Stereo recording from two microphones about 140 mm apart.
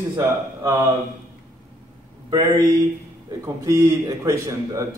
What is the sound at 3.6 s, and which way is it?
Speech, 20° right (ahead or behind).